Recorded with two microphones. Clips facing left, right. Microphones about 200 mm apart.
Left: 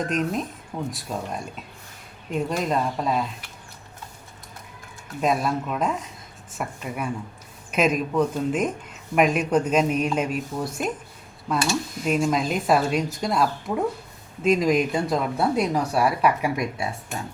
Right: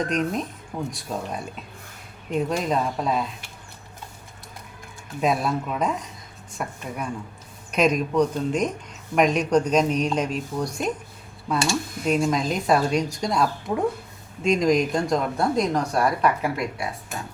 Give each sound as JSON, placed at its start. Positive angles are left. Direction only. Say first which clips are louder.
{"t": 0.0, "sound": "speech", "louder": "even", "side_deg": 0}
{"t": 5.2, "sound": "speech", "louder": "even", "side_deg": 0}